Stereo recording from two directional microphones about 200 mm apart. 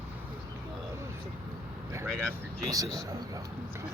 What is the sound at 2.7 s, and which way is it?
Speech, 15° right (ahead or behind).